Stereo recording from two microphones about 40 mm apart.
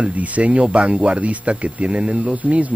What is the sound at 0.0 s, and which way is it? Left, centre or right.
A man's voice, right.